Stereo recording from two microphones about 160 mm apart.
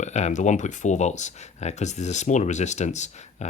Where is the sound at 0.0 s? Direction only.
45° left (ahead or behind).